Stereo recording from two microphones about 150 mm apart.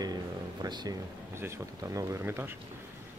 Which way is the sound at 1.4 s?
20° right (ahead or behind).